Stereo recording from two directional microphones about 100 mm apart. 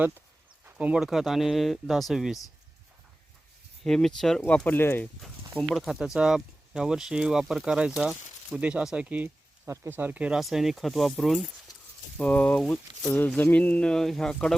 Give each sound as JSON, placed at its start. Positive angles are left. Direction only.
{"t": 0.6, "sound": "speech", "side_deg": -15}
{"t": 3.8, "sound": "speech", "side_deg": 5}
{"t": 5.5, "sound": "speech", "side_deg": 5}
{"t": 12.1, "sound": "speech", "side_deg": 15}